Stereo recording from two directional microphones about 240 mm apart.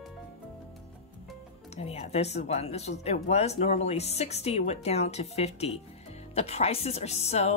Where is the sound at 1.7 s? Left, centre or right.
Left.